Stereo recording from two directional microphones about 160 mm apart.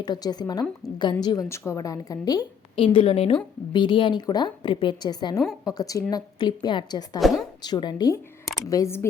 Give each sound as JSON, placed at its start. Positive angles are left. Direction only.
{"t": 0.0, "sound": "a woman's voice", "side_deg": 25}
{"t": 2.7, "sound": "a woman's voice", "side_deg": 35}
{"t": 7.2, "sound": "a woman's voice", "side_deg": 0}
{"t": 7.6, "sound": "a woman's voice", "side_deg": 25}